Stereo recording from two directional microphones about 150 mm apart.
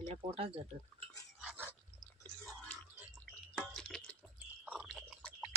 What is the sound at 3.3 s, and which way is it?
Drip, 5° left (ahead or behind).